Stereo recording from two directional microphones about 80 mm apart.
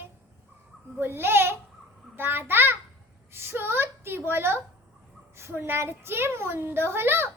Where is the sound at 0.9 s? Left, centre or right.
Right.